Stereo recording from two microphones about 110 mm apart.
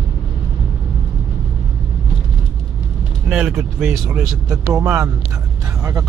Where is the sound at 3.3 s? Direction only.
5° right (ahead or behind).